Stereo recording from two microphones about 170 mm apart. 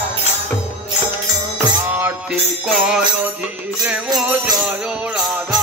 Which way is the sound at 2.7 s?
Centre (ahead or behind).